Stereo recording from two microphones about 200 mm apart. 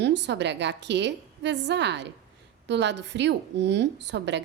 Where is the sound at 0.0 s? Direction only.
60° right (ahead or behind).